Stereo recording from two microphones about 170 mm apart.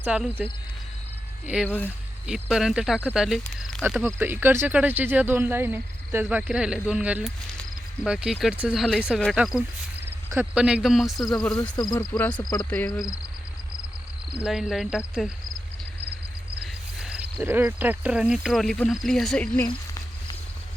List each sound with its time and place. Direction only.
0.0 s speech: 5° right (ahead or behind)
1.6 s speech: 10° left (ahead or behind)
2.2 s speech: centre (ahead or behind)
3.8 s speech: 10° right (ahead or behind); by 12.3 s 10° left (ahead or behind)
12.3 s speech: 25° left (ahead or behind)
14.4 s speech: 5° right (ahead or behind)
17.0 s cricket: 5° right (ahead or behind)
17.4 s speech: 10° right (ahead or behind); by 19.6 s 5° left (ahead or behind)